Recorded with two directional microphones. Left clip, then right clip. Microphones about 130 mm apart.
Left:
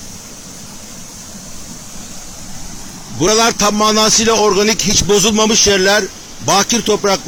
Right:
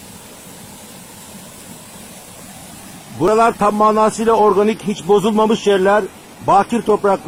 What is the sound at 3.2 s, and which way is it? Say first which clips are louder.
Speech: even; 25° left (ahead or behind).